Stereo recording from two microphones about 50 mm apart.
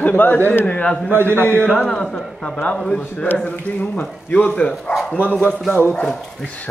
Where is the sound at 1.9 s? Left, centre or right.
Centre.